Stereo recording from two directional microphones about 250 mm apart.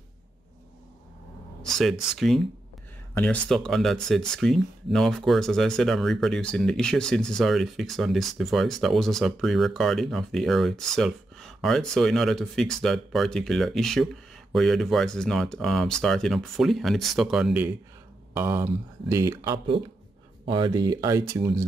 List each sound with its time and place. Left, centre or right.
1.6 s speech: centre